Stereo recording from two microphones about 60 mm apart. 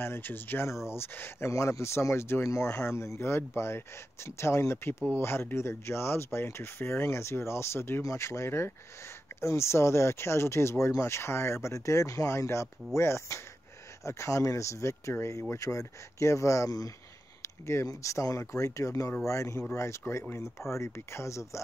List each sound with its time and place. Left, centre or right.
0.0 s speech: left
1.5 s speech: left
17.4 s a sound: left
17.8 s speech: left